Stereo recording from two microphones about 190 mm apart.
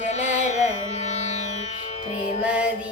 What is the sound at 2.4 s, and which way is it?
Music, 5° right (ahead or behind).